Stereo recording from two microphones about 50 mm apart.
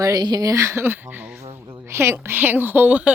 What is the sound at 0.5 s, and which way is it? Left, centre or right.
Speech, right.